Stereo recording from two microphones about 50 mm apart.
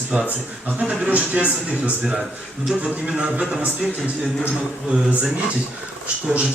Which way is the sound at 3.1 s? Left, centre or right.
Right.